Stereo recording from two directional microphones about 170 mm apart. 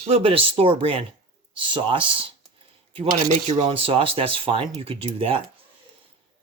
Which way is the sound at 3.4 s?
40° right (ahead or behind).